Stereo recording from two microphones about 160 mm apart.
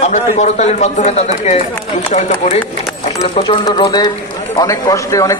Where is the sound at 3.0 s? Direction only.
35° left (ahead or behind); by 5.4 s 20° left (ahead or behind).